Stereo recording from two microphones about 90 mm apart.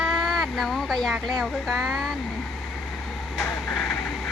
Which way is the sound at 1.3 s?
Centre (ahead or behind).